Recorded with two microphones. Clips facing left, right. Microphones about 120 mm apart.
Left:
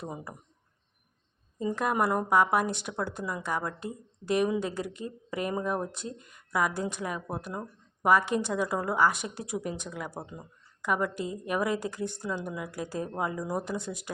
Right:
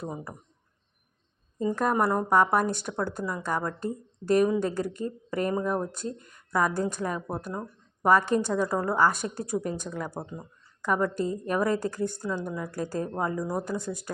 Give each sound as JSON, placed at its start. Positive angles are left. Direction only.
{"t": 0.0, "sound": "a woman's voice", "side_deg": 10}
{"t": 1.5, "sound": "a woman's voice", "side_deg": 10}
{"t": 9.9, "sound": "a woman's voice", "side_deg": 5}